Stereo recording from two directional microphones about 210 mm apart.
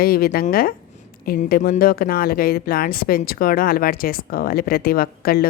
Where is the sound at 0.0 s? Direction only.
45° left (ahead or behind).